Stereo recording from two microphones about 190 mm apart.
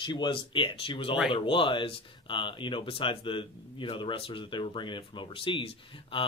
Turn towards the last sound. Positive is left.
turn(degrees=30)  # may be behind; listen again after turning